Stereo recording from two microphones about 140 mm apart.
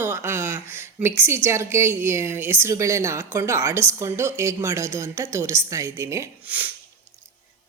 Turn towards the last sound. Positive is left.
turn(degrees=-10)  # may be behind; listen again after turning